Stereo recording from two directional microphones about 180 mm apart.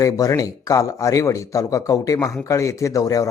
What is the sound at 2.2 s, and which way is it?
Speech, centre (ahead or behind).